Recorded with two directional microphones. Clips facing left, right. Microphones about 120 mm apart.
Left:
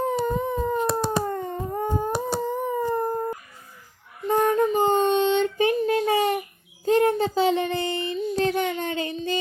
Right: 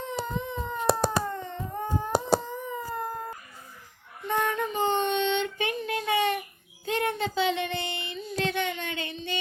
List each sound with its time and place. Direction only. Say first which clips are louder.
0.3 s a sound: left 8 dB; 45° left (ahead or behind)
2.9 s howl: left 8 dB; 40° left (ahead or behind)
4.3 s child singing: left 8 dB; 40° left (ahead or behind)